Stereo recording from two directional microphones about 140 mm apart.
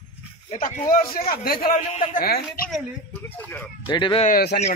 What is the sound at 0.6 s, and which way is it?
A man's voice, 85° left.